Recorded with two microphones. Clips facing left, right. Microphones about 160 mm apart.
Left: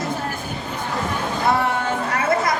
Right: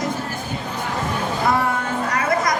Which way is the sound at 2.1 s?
30° left (ahead or behind).